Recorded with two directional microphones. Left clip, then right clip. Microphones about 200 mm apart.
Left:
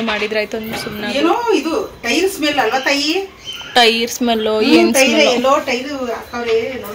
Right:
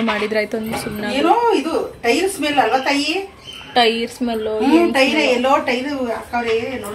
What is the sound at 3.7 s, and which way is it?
Speech, centre (ahead or behind).